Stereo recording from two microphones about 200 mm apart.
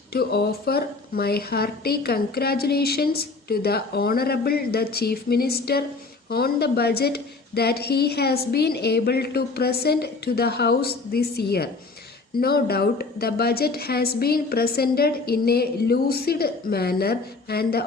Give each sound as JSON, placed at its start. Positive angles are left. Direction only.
{"t": 0.1, "sound": "a woman's voice", "side_deg": 55}